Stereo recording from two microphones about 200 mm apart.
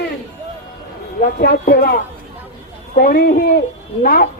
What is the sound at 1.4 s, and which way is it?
A woman's voice, 50° left (ahead or behind).